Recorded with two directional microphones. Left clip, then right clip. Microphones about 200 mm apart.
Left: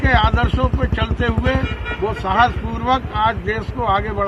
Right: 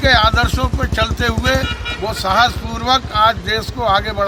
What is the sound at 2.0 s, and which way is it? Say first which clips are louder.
Speech: left 1 dB; 25° right (ahead or behind).